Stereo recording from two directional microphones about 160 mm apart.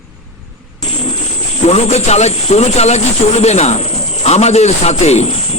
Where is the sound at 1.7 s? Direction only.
40° left (ahead or behind).